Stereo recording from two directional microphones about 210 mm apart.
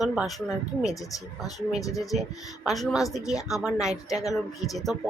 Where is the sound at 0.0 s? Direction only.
Centre (ahead or behind).